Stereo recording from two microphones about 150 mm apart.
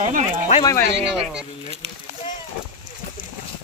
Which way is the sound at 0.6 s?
20° left (ahead or behind).